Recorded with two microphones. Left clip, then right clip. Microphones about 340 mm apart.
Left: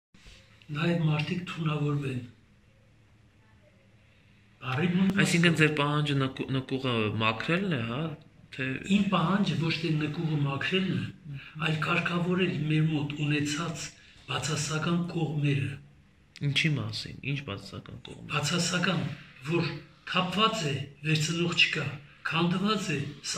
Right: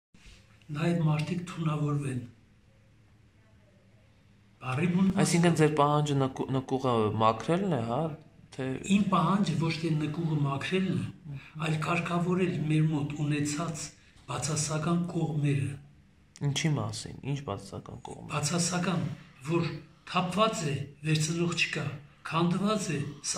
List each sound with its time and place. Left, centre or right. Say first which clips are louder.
0.7 s a man's voice: left 1 dB; centre
4.6 s a man's voice: left 1 dB; centre
16.3 s a man's voice: left 4 dB; centre